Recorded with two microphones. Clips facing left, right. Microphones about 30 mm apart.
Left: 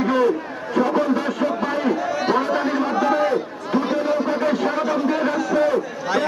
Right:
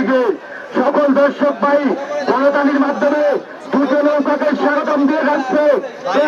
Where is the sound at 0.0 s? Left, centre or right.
Centre.